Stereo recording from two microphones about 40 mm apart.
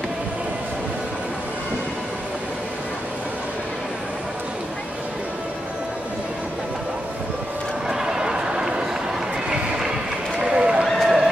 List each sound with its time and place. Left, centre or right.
7.9 s run: centre
10.4 s run: right
11.0 s a sound: centre